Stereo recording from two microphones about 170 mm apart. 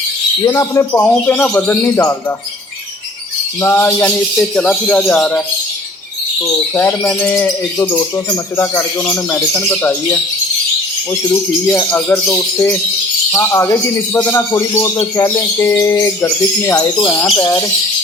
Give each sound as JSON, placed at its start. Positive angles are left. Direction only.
{"t": 0.4, "sound": "speech", "side_deg": 20}
{"t": 1.0, "sound": "speech", "side_deg": 5}
{"t": 3.6, "sound": "speech", "side_deg": 10}
{"t": 6.5, "sound": "speech", "side_deg": 15}